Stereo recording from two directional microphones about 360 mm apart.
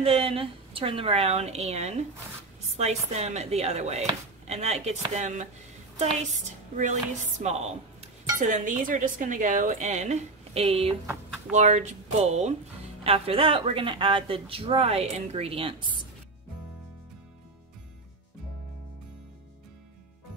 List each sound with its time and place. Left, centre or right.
0.0 s speech: centre
7.3 s dishes: centre
13.0 s speech: centre